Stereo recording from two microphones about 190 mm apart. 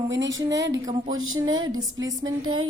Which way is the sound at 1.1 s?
90° right.